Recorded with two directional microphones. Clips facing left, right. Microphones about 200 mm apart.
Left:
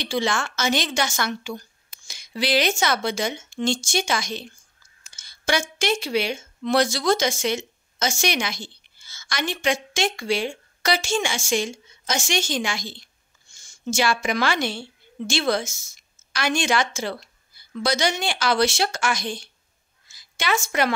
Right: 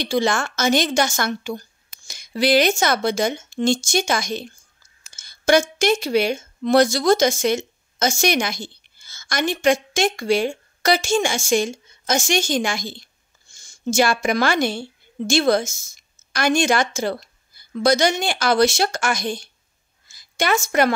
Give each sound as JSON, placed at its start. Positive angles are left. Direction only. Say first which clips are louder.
{"t": 0.0, "sound": "a woman's voice", "louder": "right 4 dB", "side_deg": -45}